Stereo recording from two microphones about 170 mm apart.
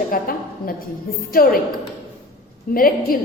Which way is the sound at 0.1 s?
55° left (ahead or behind).